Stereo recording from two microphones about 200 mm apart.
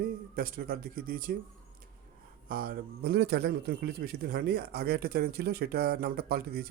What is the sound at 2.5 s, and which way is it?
A man's voice, 50° right (ahead or behind).